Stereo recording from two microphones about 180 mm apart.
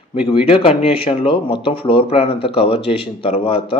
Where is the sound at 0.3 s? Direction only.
30° left (ahead or behind).